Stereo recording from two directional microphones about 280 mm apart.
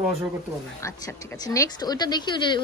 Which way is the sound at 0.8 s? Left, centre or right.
Centre.